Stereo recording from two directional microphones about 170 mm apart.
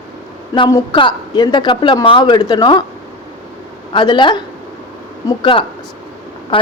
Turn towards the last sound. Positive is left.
turn(degrees=30)  # may be behind; listen again after turning